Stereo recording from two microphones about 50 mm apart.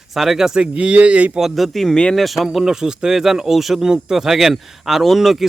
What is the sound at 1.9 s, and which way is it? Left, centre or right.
Speech, centre.